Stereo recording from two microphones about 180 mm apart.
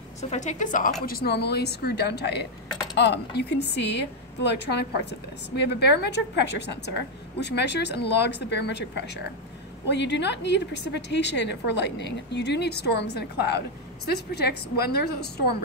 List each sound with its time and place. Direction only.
0.2 s a woman's voice: 40° left (ahead or behind)
1.0 s a woman's voice: 60° left (ahead or behind)